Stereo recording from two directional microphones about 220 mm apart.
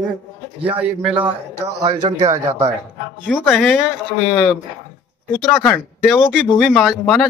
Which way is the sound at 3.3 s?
Centre (ahead or behind).